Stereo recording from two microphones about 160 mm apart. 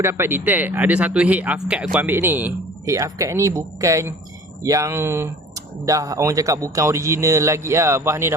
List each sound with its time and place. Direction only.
0.0 s speech: 15° right (ahead or behind)